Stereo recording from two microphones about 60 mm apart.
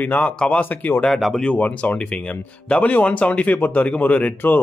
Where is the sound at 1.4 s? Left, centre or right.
Left.